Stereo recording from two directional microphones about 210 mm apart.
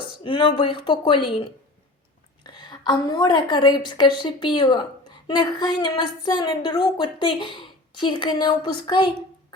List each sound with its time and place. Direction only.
0.0 s a woman's voice: 25° left (ahead or behind)